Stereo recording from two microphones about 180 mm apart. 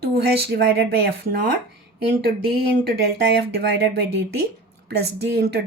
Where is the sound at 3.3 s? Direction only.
70° right (ahead or behind).